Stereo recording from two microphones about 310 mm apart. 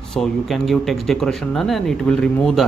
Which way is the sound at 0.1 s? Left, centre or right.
Centre.